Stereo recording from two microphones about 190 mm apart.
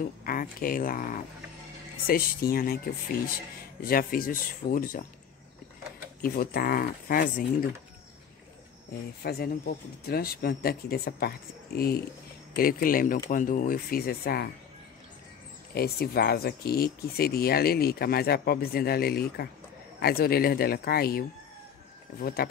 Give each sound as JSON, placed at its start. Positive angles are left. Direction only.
{"t": 0.2, "sound": "speech", "side_deg": 50}
{"t": 6.2, "sound": "speech", "side_deg": 50}
{"t": 9.2, "sound": "speech", "side_deg": 55}
{"t": 15.7, "sound": "speech", "side_deg": 55}
{"t": 22.2, "sound": "speech", "side_deg": 55}